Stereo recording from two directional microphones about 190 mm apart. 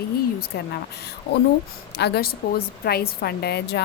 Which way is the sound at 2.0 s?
60° left (ahead or behind).